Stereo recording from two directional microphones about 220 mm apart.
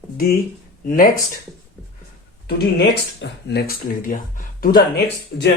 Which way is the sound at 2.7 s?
50° left (ahead or behind).